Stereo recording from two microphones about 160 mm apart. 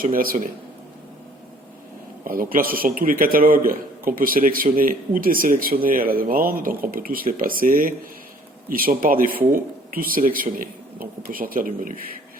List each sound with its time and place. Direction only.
0.0 s a man's voice: 65° right (ahead or behind)
2.2 s a man's voice: 60° right (ahead or behind)